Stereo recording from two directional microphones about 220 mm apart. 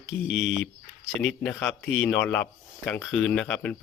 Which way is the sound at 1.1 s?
55° left (ahead or behind).